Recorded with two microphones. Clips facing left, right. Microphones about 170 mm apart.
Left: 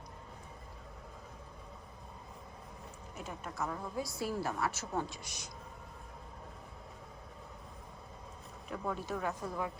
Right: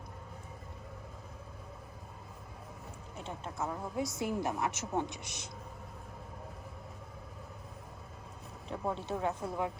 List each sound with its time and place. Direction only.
3.2 s a woman's voice: 25° right (ahead or behind)
8.7 s a woman's voice: 25° right (ahead or behind)